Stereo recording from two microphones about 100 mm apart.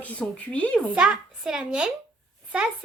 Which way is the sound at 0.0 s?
15° left (ahead or behind).